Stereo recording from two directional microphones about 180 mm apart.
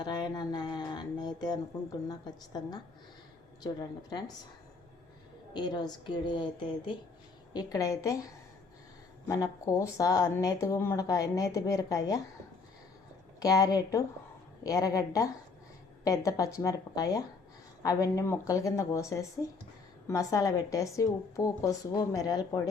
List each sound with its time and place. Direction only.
0.0 s a sound: 25° left (ahead or behind)
2.0 s a woman's voice: 20° left (ahead or behind)
5.5 s a woman's voice: 25° left (ahead or behind)
13.4 s a woman's voice: 20° left (ahead or behind)